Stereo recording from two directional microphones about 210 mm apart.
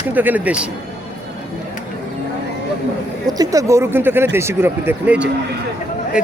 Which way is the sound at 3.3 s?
15° right (ahead or behind).